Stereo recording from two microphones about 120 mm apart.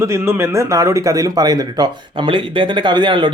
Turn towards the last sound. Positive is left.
turn(degrees=-40)  # may be behind; listen again after turning